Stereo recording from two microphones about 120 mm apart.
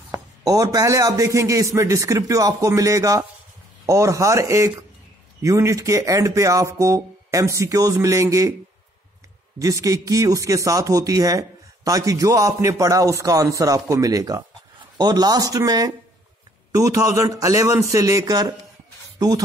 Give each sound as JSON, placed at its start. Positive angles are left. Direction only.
{"t": 0.4, "sound": "speech", "side_deg": -30}
{"t": 9.6, "sound": "speech", "side_deg": -30}